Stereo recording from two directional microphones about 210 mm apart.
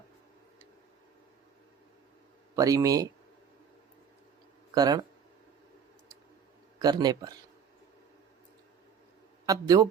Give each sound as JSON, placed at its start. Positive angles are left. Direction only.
{"t": 2.6, "sound": "speech", "side_deg": -15}
{"t": 4.7, "sound": "speech", "side_deg": -20}
{"t": 6.7, "sound": "speech", "side_deg": -20}
{"t": 9.5, "sound": "speech", "side_deg": -15}